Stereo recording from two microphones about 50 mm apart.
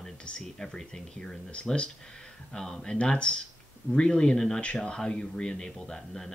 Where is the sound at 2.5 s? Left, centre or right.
Centre.